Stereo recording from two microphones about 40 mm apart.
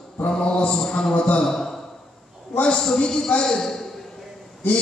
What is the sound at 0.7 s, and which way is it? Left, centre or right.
A man's voice, centre.